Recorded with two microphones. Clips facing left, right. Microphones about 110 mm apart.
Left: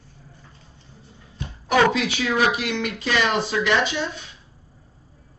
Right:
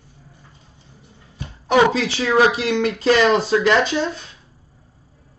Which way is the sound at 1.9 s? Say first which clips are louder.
Right 5 dB; 30° right (ahead or behind).